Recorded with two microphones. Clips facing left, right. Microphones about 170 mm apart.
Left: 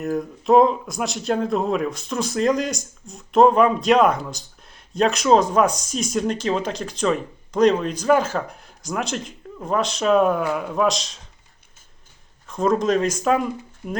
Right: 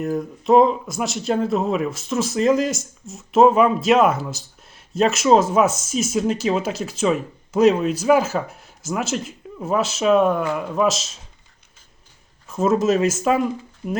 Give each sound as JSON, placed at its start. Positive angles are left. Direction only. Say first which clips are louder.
{"t": 0.0, "sound": "speech", "louder": "right 1 dB", "side_deg": 0}
{"t": 12.5, "sound": "speech", "louder": "right 2 dB", "side_deg": -5}